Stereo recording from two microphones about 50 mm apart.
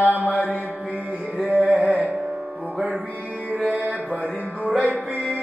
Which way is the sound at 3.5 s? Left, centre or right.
Right.